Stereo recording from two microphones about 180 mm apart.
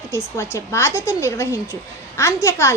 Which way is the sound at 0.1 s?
15° left (ahead or behind).